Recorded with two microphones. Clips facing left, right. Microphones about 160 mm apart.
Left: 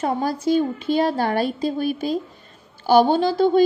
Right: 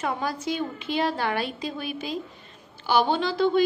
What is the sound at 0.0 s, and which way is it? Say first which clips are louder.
A woman's voice: left 6 dB; 35° left (ahead or behind).